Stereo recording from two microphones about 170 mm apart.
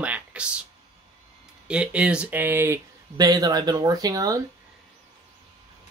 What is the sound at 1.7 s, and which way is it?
Speech, 5° right (ahead or behind).